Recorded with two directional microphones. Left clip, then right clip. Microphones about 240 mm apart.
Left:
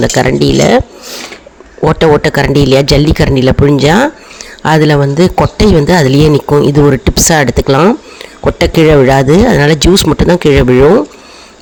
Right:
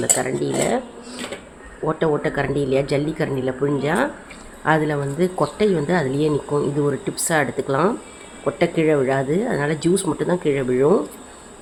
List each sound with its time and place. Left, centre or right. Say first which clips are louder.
0.0 s speech: left 13 dB; left